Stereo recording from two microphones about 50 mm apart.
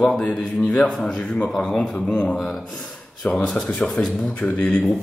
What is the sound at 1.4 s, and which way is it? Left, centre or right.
Speech, centre.